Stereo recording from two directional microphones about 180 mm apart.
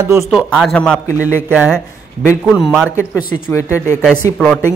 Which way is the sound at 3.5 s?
15° left (ahead or behind).